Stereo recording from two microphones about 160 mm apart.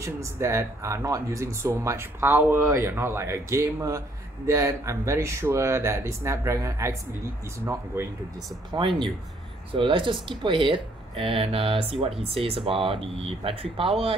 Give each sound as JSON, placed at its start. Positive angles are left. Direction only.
{"t": 0.0, "sound": "speech", "side_deg": -20}
{"t": 8.7, "sound": "speech", "side_deg": -30}